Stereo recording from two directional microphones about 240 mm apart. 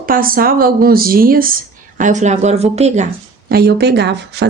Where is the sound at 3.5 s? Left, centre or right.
Right.